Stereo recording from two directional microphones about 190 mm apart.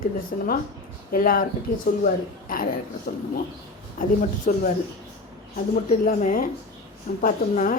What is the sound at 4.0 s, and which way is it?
Speech, 45° left (ahead or behind).